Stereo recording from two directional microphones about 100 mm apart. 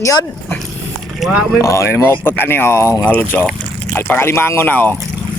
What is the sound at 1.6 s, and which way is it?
Speech, 30° left (ahead or behind).